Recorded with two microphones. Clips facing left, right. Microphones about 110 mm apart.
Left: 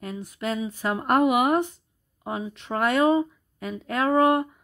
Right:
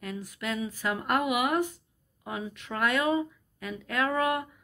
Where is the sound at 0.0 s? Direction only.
25° left (ahead or behind).